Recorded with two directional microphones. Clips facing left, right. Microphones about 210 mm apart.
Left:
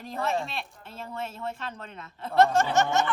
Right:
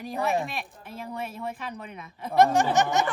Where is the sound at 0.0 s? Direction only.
15° right (ahead or behind).